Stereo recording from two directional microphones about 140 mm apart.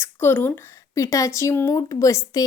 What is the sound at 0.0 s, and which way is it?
Speech, 15° left (ahead or behind).